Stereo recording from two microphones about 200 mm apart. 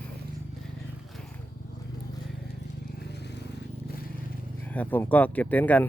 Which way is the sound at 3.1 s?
55° left (ahead or behind).